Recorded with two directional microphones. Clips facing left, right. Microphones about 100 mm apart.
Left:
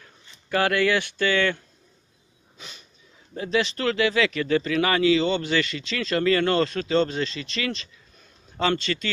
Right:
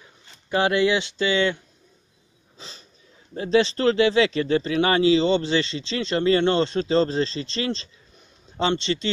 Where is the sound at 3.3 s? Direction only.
30° right (ahead or behind).